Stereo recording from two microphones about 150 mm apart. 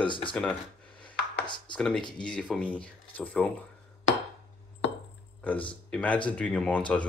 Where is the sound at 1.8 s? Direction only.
5° left (ahead or behind).